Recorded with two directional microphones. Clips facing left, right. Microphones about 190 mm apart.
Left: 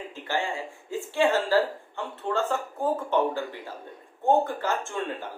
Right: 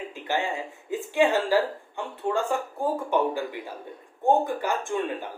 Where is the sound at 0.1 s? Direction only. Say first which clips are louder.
Right 1 dB; 20° right (ahead or behind).